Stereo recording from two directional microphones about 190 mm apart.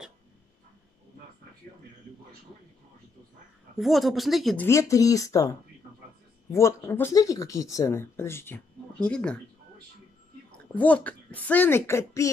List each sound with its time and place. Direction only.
3.7 s speech: centre (ahead or behind)
4.6 s speech: 15° left (ahead or behind)
10.7 s speech: 10° left (ahead or behind)